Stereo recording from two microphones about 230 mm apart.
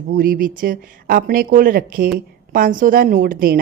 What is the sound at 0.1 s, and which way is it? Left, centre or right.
A woman's voice, right.